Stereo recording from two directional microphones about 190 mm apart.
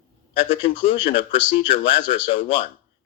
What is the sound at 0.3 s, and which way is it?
Speech, 30° left (ahead or behind).